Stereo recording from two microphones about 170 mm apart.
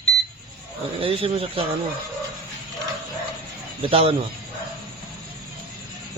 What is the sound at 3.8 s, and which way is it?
Speech, 35° right (ahead or behind).